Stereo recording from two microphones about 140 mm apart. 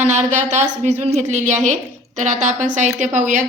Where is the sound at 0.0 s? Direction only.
55° right (ahead or behind).